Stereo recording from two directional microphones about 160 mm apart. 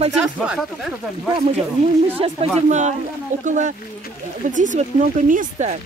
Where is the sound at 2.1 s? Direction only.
45° right (ahead or behind).